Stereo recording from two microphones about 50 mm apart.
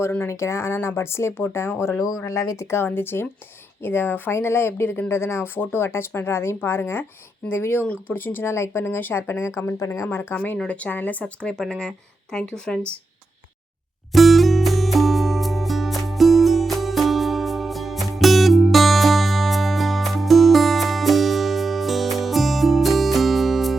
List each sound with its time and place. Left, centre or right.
0.3 s speech: left
2.5 s speech: left
7.9 s speech: left
8.5 s speech: left
9.7 s a woman's voice: left
10.1 s speech: left
10.7 s speech: left
11.6 s speech: centre
14.1 s music: centre